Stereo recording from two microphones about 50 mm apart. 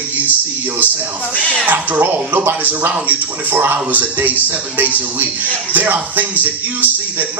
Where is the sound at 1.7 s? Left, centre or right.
Right.